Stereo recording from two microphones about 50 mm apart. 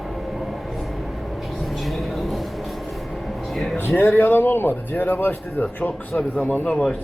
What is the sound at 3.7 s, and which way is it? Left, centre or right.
Speech, left.